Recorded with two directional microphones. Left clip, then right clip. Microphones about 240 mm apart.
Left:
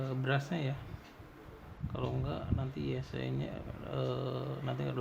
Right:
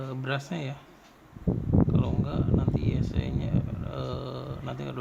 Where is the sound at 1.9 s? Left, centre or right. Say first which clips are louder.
Right 7 dB; centre.